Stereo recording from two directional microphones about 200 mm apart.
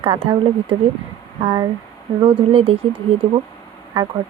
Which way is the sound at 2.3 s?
30° right (ahead or behind).